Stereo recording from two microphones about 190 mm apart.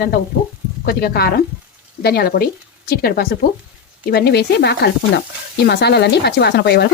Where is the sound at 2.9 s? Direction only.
55° left (ahead or behind).